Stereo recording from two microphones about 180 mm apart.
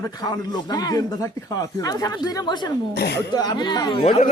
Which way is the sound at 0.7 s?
20° left (ahead or behind).